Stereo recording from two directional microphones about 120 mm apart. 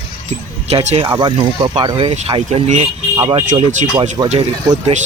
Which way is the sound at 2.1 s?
50° right (ahead or behind).